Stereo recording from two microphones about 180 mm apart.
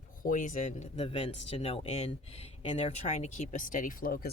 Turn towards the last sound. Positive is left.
turn(degrees=55)  # may be behind; listen again after turning